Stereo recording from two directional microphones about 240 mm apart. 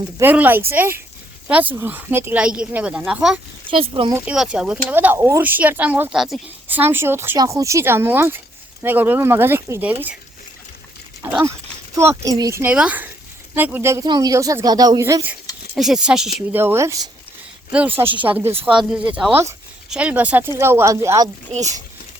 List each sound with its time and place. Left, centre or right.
0.2 s speech: centre
3.7 s speech: right
4.1 s speech: centre
11.2 s speech: centre